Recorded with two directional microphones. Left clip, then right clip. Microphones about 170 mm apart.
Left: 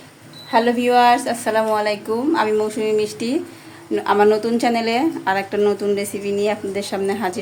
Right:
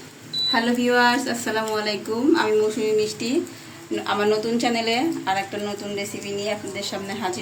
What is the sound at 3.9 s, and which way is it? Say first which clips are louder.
Speech: left 6 dB; 55° left (ahead or behind).